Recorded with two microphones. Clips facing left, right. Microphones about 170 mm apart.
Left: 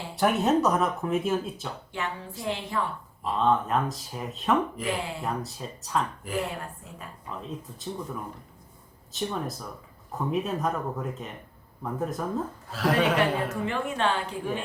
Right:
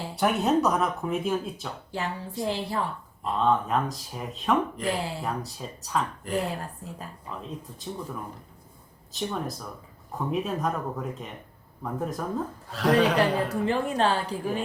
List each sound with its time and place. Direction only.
0.2 s speech: centre (ahead or behind)
1.9 s a woman's voice: 35° right (ahead or behind)
3.2 s speech: centre (ahead or behind)
13.7 s a woman's voice: 35° right (ahead or behind)